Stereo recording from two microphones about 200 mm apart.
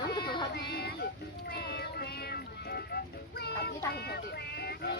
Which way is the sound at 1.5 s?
55° left (ahead or behind).